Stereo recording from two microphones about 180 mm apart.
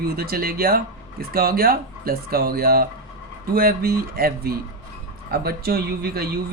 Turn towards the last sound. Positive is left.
turn(degrees=-60)  # may be behind; listen again after turning